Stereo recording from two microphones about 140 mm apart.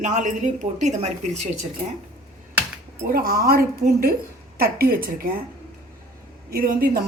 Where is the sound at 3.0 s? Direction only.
90° right.